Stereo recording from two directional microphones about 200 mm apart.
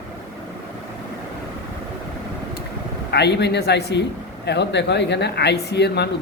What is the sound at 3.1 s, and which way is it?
Speech, 55° left (ahead or behind).